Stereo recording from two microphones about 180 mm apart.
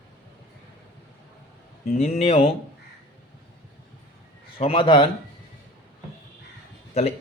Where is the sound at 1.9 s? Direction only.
35° left (ahead or behind).